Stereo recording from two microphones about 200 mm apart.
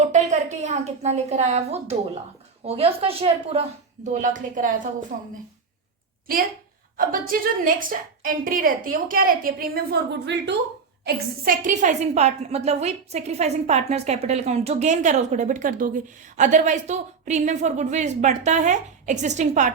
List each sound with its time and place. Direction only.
0.0 s a woman's voice: 35° right (ahead or behind)
6.9 s a woman's voice: 45° right (ahead or behind)
11.0 s a woman's voice: 45° right (ahead or behind)